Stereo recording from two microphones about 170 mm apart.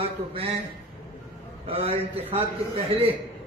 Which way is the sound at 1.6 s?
35° right (ahead or behind).